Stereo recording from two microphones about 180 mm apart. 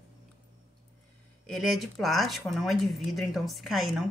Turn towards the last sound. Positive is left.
turn(degrees=0)  # may be behind; listen again after turning